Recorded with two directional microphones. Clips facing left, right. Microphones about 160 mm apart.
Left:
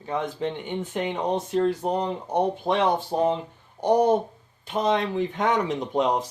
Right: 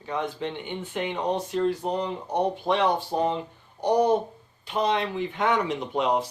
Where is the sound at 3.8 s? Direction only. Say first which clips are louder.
Left 2 dB; 50° left (ahead or behind).